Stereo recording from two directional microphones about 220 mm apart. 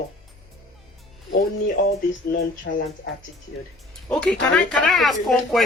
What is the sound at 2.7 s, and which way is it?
Speech, 50° left (ahead or behind).